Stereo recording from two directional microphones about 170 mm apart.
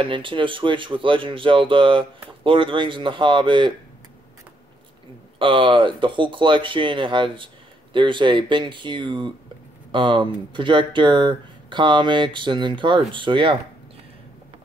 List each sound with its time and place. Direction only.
0.0 s speech: 30° right (ahead or behind)
5.4 s speech: 30° right (ahead or behind)